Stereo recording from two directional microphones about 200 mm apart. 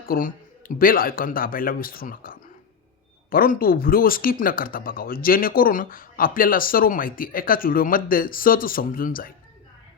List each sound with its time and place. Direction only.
0.0 s speech: 45° left (ahead or behind)